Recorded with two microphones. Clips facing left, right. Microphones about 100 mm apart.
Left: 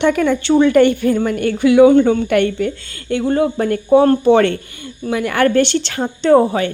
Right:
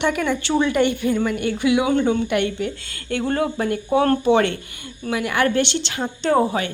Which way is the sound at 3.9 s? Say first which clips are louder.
Left 7 dB; 30° left (ahead or behind).